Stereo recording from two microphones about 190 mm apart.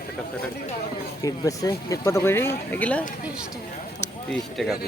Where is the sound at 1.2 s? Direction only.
20° left (ahead or behind).